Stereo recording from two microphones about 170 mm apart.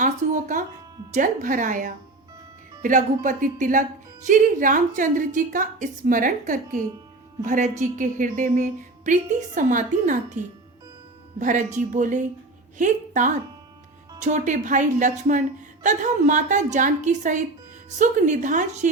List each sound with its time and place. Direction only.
0.0 s music: 45° right (ahead or behind)
1.1 s a woman's voice: 50° right (ahead or behind)
11.3 s a woman's voice: 45° right (ahead or behind)